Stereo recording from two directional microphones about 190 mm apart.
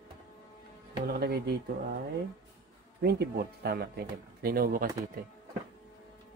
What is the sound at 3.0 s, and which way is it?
Speech, 55° right (ahead or behind).